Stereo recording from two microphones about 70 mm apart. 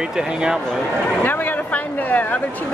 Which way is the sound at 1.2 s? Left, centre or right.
Left.